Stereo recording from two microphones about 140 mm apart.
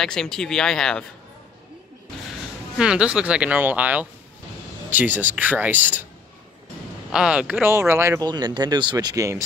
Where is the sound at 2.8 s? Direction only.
5° right (ahead or behind).